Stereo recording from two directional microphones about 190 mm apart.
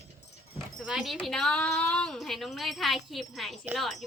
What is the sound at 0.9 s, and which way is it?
A woman's voice, centre (ahead or behind).